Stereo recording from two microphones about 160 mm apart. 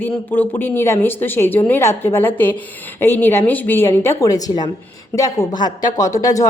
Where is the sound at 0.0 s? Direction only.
10° left (ahead or behind).